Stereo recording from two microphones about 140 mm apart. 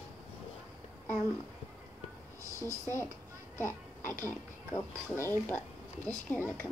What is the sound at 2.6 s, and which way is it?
Speech, 20° left (ahead or behind).